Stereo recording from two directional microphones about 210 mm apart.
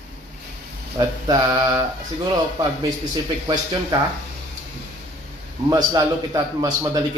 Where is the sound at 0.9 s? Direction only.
20° right (ahead or behind).